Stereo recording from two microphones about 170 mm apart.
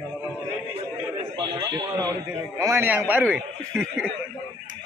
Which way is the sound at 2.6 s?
15° right (ahead or behind).